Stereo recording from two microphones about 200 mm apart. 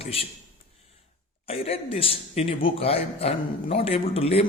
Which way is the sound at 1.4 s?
30° left (ahead or behind).